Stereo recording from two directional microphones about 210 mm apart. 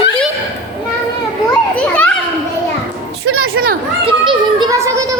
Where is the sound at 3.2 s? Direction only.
90° right.